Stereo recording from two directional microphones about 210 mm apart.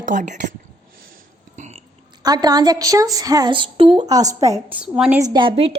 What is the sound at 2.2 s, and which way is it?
A woman's voice, 20° right (ahead or behind).